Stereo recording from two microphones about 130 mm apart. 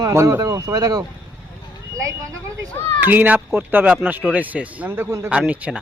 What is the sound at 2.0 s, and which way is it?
Speech, 20° right (ahead or behind).